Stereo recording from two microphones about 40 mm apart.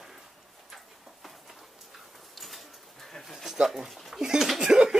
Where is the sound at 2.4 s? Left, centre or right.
Centre.